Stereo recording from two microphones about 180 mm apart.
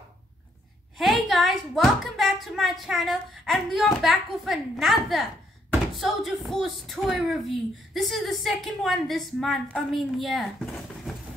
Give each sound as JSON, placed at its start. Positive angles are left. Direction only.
{"t": 0.9, "sound": "speech", "side_deg": 0}